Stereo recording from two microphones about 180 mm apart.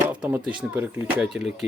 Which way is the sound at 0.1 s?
10° right (ahead or behind).